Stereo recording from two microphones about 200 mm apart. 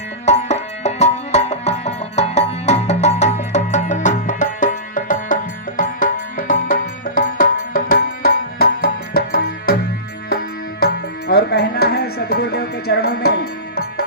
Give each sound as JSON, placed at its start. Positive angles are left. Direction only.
{"t": 0.3, "sound": "music", "side_deg": 35}